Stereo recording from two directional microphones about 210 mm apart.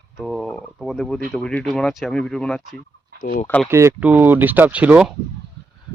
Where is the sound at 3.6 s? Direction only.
10° right (ahead or behind).